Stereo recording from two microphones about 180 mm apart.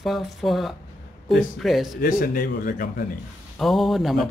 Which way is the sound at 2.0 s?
55° left (ahead or behind).